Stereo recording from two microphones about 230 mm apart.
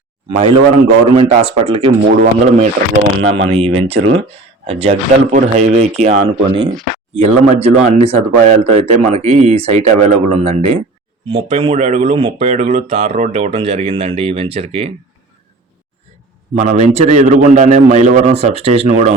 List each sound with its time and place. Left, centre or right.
0.3 s speech: right
2.0 s a man's voice: right
3.2 s speech: right
16.6 s a man's voice: right